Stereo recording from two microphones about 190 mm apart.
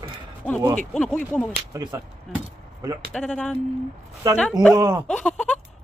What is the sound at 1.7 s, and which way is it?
Speech, 15° right (ahead or behind).